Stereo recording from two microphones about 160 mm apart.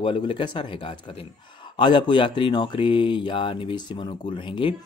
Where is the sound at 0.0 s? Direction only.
30° left (ahead or behind).